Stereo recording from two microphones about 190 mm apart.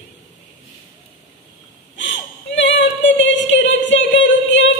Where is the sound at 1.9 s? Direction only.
75° left (ahead or behind).